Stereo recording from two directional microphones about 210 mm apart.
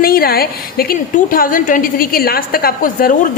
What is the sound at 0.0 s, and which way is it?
A woman's voice, 45° left (ahead or behind).